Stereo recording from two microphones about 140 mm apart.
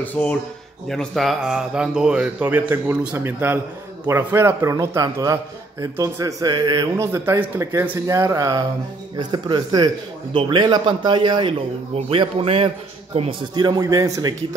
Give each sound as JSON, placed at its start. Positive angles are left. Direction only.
{"t": 0.0, "sound": "a man's voice", "side_deg": 10}
{"t": 13.6, "sound": "a man's voice", "side_deg": -30}